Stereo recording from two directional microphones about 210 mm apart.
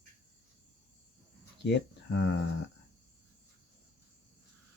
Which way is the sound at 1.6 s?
55° left (ahead or behind).